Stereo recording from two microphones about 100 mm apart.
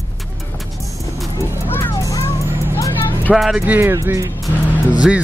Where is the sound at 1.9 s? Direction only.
30° left (ahead or behind).